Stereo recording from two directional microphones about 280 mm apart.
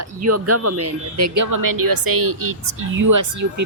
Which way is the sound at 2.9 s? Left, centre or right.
Right.